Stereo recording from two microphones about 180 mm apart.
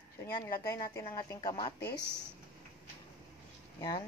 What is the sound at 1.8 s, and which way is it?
Speech, 65° left (ahead or behind).